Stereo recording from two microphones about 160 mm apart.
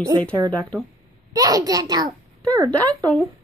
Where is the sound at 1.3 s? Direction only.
25° right (ahead or behind).